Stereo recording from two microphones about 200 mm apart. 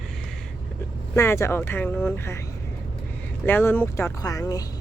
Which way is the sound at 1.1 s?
15° left (ahead or behind).